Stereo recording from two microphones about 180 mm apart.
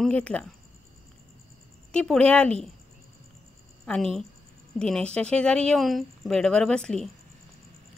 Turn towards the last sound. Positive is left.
turn(degrees=5)  # may be behind; listen again after turning